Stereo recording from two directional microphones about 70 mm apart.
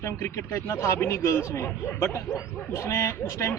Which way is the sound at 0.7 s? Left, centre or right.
Left.